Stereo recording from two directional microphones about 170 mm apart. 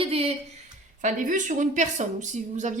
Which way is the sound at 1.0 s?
50° right (ahead or behind).